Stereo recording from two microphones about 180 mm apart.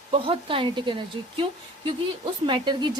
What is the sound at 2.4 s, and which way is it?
Speech, 25° right (ahead or behind).